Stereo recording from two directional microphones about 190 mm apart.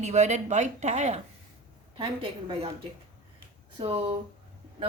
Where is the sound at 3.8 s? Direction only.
30° right (ahead or behind).